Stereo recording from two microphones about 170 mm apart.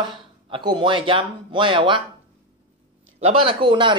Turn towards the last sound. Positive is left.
turn(degrees=-30)  # may be behind; listen again after turning